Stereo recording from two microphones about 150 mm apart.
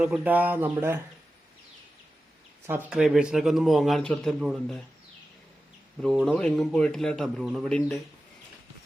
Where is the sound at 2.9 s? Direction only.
5° right (ahead or behind).